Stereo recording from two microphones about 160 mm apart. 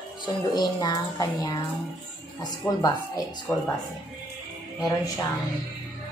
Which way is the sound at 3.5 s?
10° left (ahead or behind).